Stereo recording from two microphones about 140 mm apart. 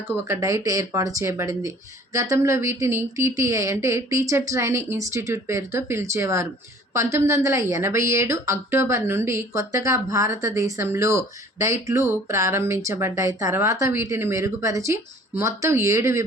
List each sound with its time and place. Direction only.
0.1 s speech: 20° right (ahead or behind)